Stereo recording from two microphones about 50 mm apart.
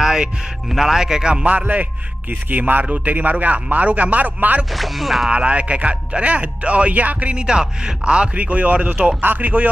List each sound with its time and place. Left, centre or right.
0.0 s speech: centre
1.4 s a man's voice: right
4.7 s speech: centre
5.3 s speech: right
7.3 s a man's voice: centre; by 9.7 s right